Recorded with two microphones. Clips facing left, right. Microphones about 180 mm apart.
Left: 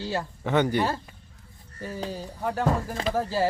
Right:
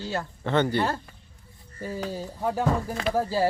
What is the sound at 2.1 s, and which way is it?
Speech, 10° right (ahead or behind).